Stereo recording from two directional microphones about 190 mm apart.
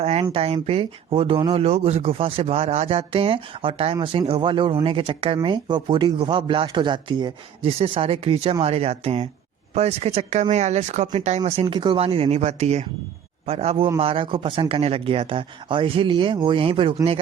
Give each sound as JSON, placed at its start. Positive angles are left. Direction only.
{"t": 0.0, "sound": "speech", "side_deg": -30}